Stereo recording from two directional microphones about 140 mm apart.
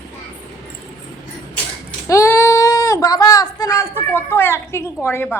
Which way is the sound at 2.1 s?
20° left (ahead or behind).